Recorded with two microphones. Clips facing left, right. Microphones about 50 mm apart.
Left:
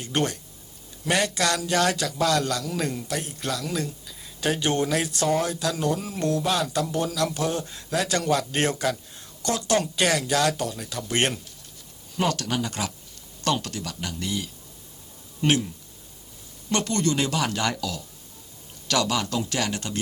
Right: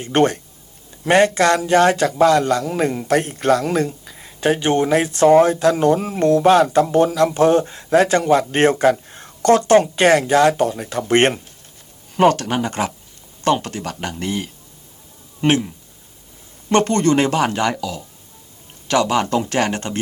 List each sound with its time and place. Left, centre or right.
0.0 s a man's voice: right
9.7 s a man's voice: right